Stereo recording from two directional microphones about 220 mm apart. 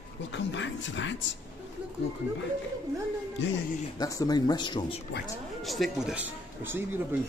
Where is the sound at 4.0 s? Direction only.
15° left (ahead or behind).